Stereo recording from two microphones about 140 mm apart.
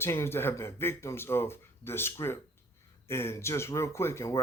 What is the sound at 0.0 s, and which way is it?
Speech, 15° left (ahead or behind).